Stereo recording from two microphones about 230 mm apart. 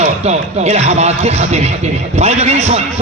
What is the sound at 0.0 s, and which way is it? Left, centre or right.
A man's voice, right.